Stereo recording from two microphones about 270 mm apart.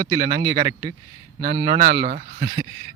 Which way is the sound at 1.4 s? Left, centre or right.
Right.